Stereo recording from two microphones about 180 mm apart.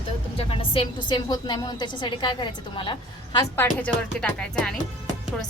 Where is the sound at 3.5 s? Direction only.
5° left (ahead or behind).